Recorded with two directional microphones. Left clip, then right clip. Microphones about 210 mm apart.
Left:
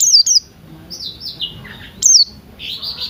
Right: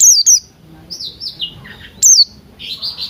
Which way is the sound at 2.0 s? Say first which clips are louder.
Right 2 dB; 20° right (ahead or behind).